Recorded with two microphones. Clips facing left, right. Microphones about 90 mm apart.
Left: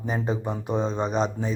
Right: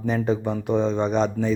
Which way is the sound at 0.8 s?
40° left (ahead or behind).